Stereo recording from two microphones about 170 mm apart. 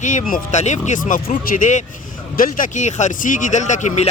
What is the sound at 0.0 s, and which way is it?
Speech, 45° left (ahead or behind).